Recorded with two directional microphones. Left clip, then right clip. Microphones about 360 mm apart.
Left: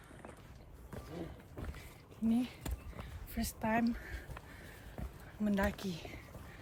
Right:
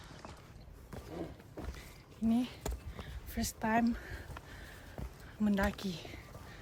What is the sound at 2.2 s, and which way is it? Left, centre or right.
Speech, centre.